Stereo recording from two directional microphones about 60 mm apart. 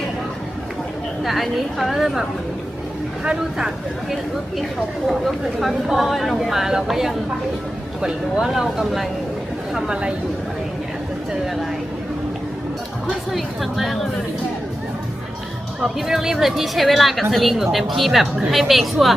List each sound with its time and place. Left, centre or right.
1.2 s speech: centre
5.0 s speech: centre
9.7 s speech: centre
13.1 s speech: centre
15.8 s speech: centre